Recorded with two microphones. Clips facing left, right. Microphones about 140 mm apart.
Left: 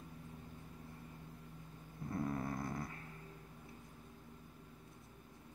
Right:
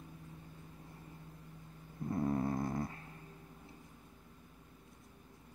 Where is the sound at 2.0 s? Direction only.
25° right (ahead or behind).